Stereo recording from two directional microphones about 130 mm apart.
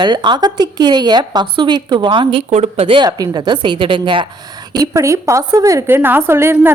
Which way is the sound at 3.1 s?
30° right (ahead or behind).